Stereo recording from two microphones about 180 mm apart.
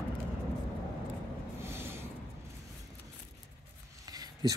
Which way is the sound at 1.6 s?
15° right (ahead or behind).